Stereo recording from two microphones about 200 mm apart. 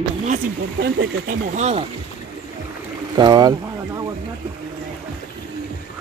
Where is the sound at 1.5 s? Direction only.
35° right (ahead or behind).